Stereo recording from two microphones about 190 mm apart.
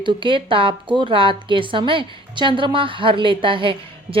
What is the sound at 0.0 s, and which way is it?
A woman's voice, 25° right (ahead or behind).